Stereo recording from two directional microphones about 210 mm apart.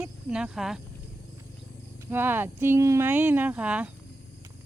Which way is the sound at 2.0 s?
10° right (ahead or behind).